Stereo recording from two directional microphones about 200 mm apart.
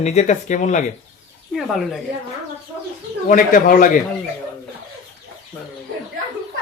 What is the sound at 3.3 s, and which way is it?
Speech, 40° left (ahead or behind).